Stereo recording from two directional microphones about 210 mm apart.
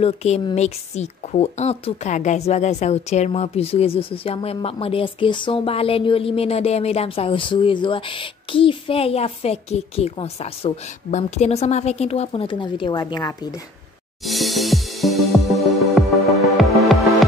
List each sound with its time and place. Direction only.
0.0 s a woman's voice: 30° left (ahead or behind)
14.2 s music: centre (ahead or behind)